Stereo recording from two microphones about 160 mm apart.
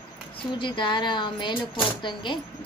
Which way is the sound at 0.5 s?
30° left (ahead or behind).